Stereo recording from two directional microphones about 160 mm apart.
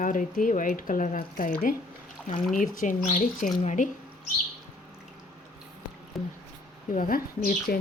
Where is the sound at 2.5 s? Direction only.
55° left (ahead or behind).